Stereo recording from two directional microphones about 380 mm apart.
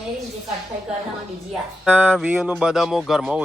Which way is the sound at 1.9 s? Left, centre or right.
Centre.